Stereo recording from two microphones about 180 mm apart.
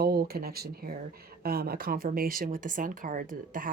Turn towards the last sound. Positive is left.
turn(degrees=-50)  # may be behind; listen again after turning